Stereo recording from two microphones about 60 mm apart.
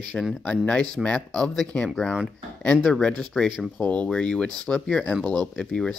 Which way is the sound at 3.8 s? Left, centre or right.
Left.